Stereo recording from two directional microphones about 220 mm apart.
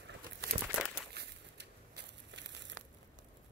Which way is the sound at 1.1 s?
50° right (ahead or behind).